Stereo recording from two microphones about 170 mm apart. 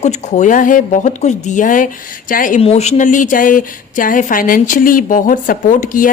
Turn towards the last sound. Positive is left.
turn(degrees=50)  # may be behind; listen again after turning